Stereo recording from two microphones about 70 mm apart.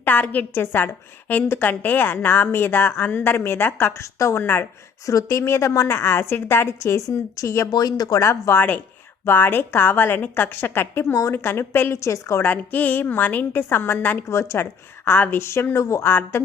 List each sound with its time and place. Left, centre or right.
0.0 s a woman's voice: left
4.0 s a woman's voice: left
4.4 s a woman's voice: left
5.0 s a woman's voice: left
7.7 s speech: left
8.2 s a woman's voice: left
8.5 s a woman's voice: left
11.1 s a woman's voice: left
11.4 s a woman's voice: left
11.9 s a woman's voice: left
12.4 s a woman's voice: left
14.3 s a woman's voice: left